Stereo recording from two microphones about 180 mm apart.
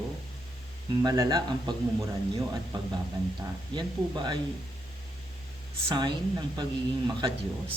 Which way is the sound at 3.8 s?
25° right (ahead or behind).